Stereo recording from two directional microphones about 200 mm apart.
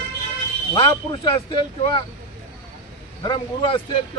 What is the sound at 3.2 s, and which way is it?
Speech, 25° left (ahead or behind).